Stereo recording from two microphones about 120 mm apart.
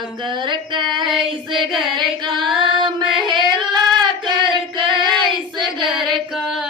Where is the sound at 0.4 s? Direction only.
40° right (ahead or behind).